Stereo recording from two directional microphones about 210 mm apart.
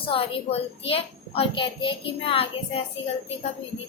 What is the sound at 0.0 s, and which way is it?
A child's voice, 25° left (ahead or behind).